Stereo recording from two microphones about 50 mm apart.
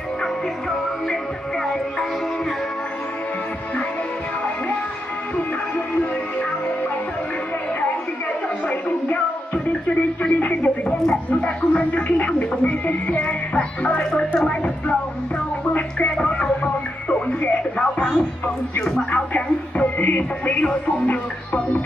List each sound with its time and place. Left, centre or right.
0.2 s music: centre
8.6 s music: left
10.2 s speech: left
15.7 s music: left
16.3 s music: centre
17.4 s speech: left
18.8 s speech: centre
19.1 s speech: left